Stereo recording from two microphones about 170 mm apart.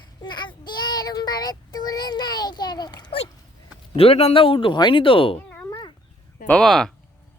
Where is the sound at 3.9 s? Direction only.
35° left (ahead or behind).